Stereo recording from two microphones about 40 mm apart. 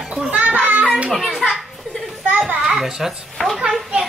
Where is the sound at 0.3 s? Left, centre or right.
Right.